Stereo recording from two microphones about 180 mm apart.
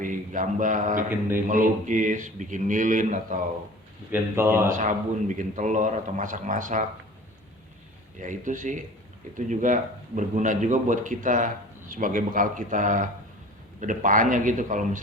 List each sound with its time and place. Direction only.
0.0 s speech: 45° right (ahead or behind)
4.1 s speech: 15° right (ahead or behind)
4.7 s speech: 45° right (ahead or behind)
8.2 s speech: 45° right (ahead or behind)